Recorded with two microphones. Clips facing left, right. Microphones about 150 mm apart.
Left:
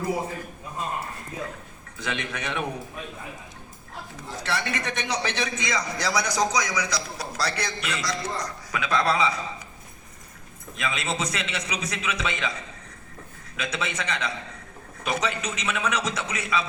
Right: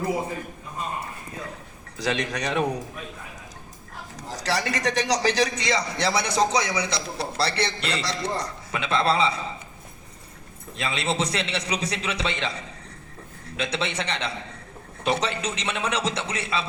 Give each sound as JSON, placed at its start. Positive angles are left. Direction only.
{"t": 2.0, "sound": "a man's voice", "side_deg": -35}
{"t": 4.2, "sound": "a man's voice", "side_deg": -40}
{"t": 10.8, "sound": "a man's voice", "side_deg": -30}
{"t": 13.6, "sound": "a man's voice", "side_deg": -30}